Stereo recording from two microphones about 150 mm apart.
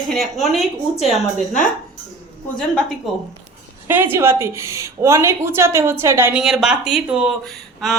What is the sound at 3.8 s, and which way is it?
A woman's voice, 15° right (ahead or behind).